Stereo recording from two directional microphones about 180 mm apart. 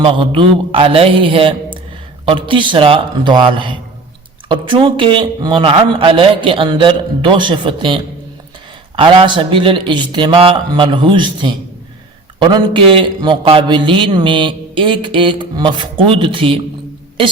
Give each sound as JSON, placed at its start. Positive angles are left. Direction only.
{"t": 0.0, "sound": "a man's voice", "side_deg": -30}